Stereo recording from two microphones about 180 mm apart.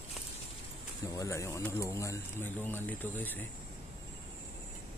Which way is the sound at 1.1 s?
15° left (ahead or behind).